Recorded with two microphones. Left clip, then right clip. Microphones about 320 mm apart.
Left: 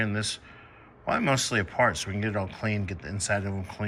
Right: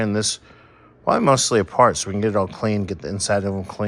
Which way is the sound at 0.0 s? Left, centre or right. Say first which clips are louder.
Right 7 dB; centre.